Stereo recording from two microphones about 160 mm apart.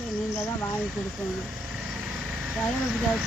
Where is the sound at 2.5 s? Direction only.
5° right (ahead or behind).